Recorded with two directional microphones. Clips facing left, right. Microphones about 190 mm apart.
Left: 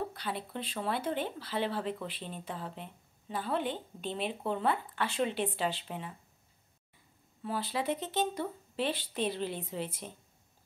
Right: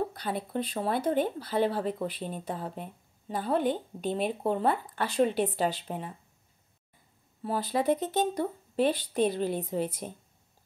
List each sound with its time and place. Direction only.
0.1 s speech: 45° right (ahead or behind)
7.4 s speech: 45° right (ahead or behind)